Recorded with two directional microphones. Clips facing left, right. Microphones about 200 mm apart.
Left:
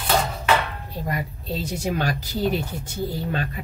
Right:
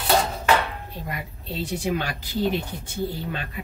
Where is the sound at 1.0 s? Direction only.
40° left (ahead or behind).